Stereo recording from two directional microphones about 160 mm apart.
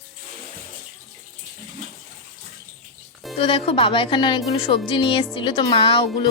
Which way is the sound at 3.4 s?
35° left (ahead or behind).